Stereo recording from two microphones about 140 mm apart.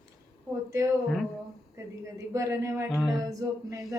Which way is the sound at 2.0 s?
20° right (ahead or behind).